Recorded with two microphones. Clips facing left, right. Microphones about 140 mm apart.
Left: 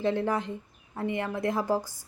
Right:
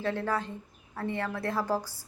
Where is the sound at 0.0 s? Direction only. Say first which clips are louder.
Left 3 dB; 20° left (ahead or behind).